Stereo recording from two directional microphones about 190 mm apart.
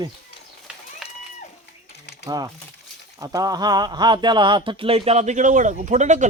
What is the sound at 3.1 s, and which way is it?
Speech, 20° right (ahead or behind).